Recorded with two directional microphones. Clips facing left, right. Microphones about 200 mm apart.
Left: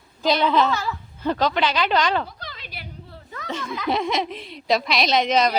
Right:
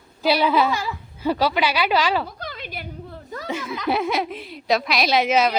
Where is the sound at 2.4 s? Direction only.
50° right (ahead or behind).